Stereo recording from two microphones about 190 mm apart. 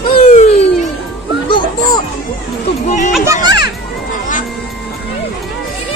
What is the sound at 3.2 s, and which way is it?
Children playing, 20° right (ahead or behind).